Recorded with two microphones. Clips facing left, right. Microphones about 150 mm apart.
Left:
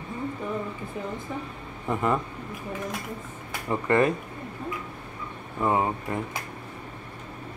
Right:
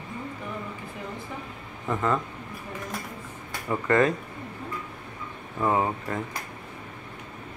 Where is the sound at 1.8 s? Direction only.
15° left (ahead or behind).